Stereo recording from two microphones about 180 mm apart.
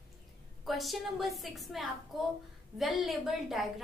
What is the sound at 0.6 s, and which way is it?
A woman's voice, centre (ahead or behind).